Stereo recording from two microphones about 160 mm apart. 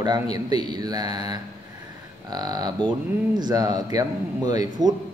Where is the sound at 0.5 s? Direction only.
25° right (ahead or behind).